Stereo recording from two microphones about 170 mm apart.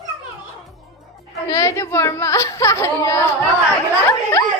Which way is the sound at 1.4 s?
20° left (ahead or behind).